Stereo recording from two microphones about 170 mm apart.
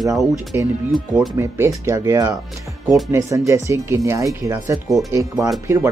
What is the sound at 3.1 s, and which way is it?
Speech, 20° right (ahead or behind).